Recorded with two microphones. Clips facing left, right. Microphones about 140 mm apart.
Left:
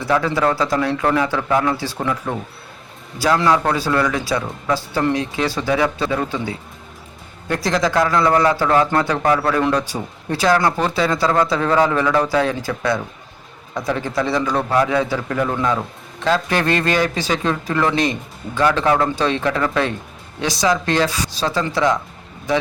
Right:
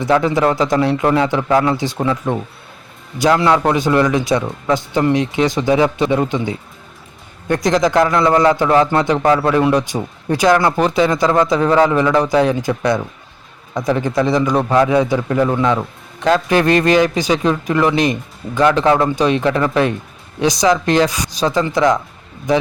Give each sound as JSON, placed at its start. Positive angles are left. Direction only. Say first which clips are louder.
{"t": 0.0, "sound": "a man's voice", "louder": "right 4 dB", "side_deg": -20}
{"t": 1.7, "sound": "a man's voice", "louder": "right 4 dB", "side_deg": -20}